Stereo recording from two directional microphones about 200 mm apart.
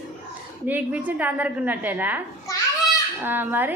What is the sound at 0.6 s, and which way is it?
A woman's voice, 10° right (ahead or behind).